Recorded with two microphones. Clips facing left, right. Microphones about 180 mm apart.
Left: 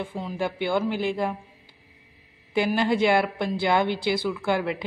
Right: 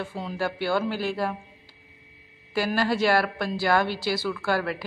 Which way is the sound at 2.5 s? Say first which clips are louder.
Left 2 dB; 20° left (ahead or behind).